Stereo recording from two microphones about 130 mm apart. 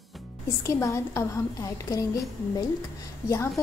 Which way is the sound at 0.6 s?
20° left (ahead or behind).